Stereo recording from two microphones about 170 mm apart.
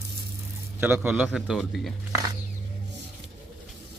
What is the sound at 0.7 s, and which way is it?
A man's voice, 10° right (ahead or behind).